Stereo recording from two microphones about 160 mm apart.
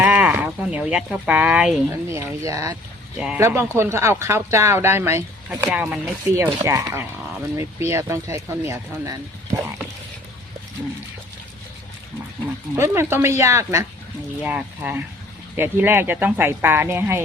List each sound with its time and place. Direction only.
0.0 s speech: 10° right (ahead or behind)
1.9 s speech: 20° right (ahead or behind)
3.2 s speech: 5° right (ahead or behind)
12.7 s speech: 15° right (ahead or behind)